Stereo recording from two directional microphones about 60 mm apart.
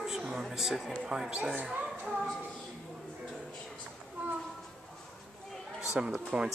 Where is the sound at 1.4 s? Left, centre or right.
Right.